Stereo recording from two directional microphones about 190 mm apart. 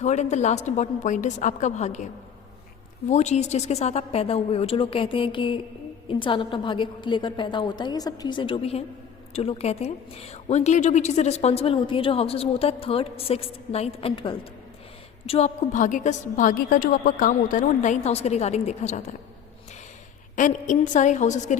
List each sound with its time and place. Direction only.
0.0 s a woman's voice: 35° left (ahead or behind)
3.1 s a woman's voice: 35° left (ahead or behind)
20.3 s a woman's voice: 40° left (ahead or behind)